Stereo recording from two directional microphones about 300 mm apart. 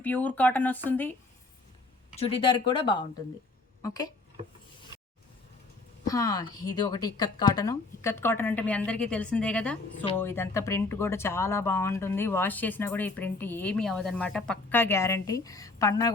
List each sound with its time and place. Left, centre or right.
0.0 s speech: centre
2.1 s speech: centre
6.1 s speech: centre